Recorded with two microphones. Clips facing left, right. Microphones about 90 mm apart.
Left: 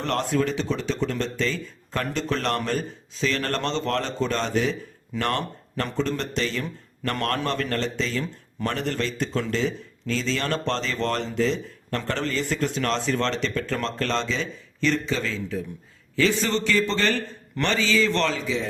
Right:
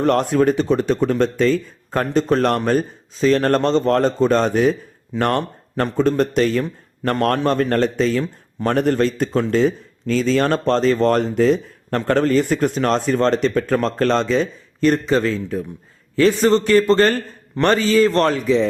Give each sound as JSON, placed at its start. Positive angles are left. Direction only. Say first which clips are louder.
{"t": 0.0, "sound": "a man's voice", "louder": "right 8 dB", "side_deg": -50}